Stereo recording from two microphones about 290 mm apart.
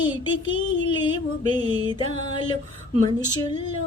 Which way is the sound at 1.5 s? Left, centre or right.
Centre.